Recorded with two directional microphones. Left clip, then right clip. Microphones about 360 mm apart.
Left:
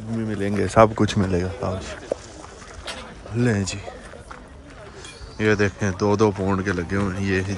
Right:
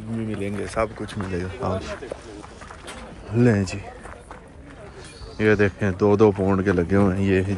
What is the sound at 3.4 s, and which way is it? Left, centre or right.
Speech, centre.